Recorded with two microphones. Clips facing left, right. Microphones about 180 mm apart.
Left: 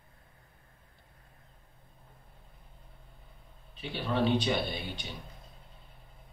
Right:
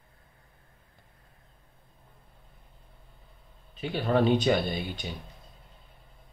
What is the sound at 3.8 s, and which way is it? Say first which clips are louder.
Speech: right 5 dB; 45° right (ahead or behind).